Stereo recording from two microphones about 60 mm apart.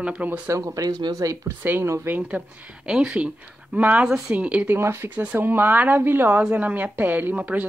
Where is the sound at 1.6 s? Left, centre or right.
Right.